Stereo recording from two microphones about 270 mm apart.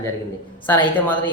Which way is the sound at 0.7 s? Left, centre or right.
Centre.